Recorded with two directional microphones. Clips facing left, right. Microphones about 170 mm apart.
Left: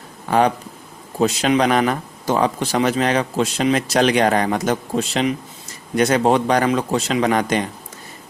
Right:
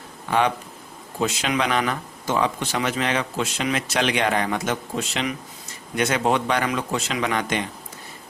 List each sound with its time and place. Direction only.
0.3 s speech: 40° left (ahead or behind)